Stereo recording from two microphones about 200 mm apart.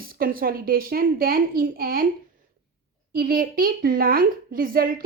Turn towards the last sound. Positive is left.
turn(degrees=-45)  # may be behind; listen again after turning